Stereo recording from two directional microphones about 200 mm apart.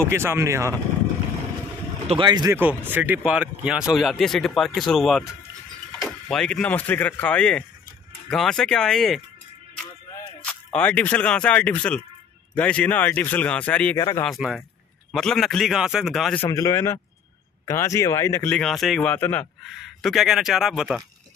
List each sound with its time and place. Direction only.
0.1 s speech: 15° right (ahead or behind)
2.0 s speech: 25° right (ahead or behind); by 9.2 s centre (ahead or behind)
10.4 s speech: 5° left (ahead or behind)
14.2 s speech: centre (ahead or behind)
16.4 s speech: 15° left (ahead or behind)
18.6 s speech: centre (ahead or behind)